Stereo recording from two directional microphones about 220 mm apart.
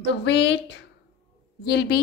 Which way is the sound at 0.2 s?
55° left (ahead or behind).